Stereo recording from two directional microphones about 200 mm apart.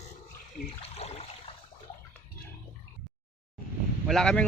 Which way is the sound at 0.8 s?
30° left (ahead or behind).